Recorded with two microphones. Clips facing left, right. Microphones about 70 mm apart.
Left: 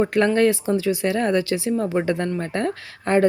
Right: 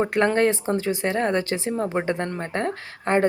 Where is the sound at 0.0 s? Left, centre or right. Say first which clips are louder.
Left 2 dB; right.